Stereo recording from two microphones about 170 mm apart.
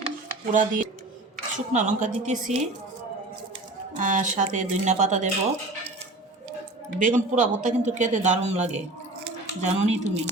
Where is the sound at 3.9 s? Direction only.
50° right (ahead or behind).